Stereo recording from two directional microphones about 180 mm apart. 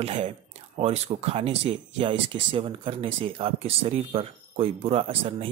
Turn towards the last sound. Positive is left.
turn(degrees=-30)  # may be behind; listen again after turning